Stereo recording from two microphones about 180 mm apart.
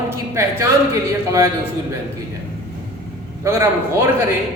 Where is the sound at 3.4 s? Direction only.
15° right (ahead or behind).